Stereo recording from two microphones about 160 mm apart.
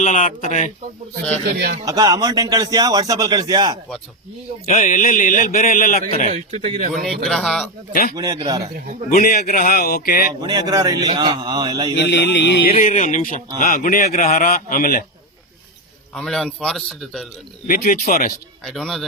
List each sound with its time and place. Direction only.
0.0 s speech: 50° left (ahead or behind)
1.5 s speech: 75° right (ahead or behind)
1.8 s speech: 25° right (ahead or behind)
4.6 s a man's voice: 55° left (ahead or behind)
6.3 s a man's voice: 45° right (ahead or behind)
6.9 s a man's voice: centre (ahead or behind)
8.1 s speech: 25° right (ahead or behind)
9.0 s a man's voice: 60° left (ahead or behind)
10.4 s speech: 25° right (ahead or behind)
11.9 s music: 90° left
12.7 s a man's voice: 50° left (ahead or behind)
16.1 s a man's voice: 5° left (ahead or behind)
17.7 s a man's voice: 55° left (ahead or behind)
18.6 s a man's voice: centre (ahead or behind)